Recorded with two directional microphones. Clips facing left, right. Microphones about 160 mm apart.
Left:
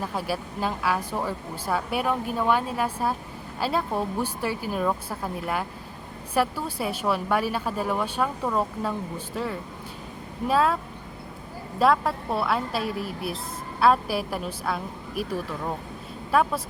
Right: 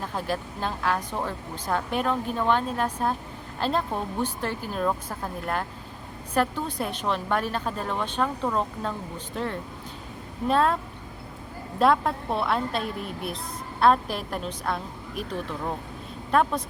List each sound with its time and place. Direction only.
0.0 s a woman's voice: 10° left (ahead or behind)
11.8 s a woman's voice: centre (ahead or behind)